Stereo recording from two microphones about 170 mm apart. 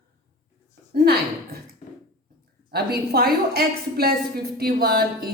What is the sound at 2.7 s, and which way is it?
A woman's voice, 65° right (ahead or behind).